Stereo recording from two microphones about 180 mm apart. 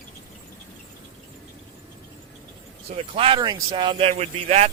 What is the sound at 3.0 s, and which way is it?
Speech, 30° right (ahead or behind).